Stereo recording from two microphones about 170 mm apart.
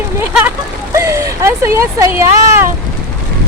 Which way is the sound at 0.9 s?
15° right (ahead or behind).